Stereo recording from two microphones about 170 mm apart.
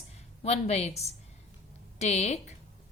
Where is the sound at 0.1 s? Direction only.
40° left (ahead or behind).